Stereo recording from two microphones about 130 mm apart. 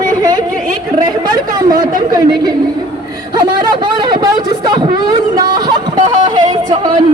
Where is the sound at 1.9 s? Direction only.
90° right.